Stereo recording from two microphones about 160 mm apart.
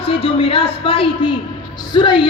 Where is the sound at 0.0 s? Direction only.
35° left (ahead or behind).